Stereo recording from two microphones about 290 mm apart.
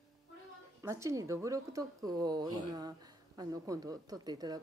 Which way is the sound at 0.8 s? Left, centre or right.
Centre.